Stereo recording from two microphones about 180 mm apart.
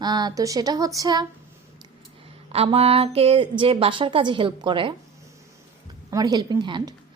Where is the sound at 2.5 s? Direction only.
35° right (ahead or behind).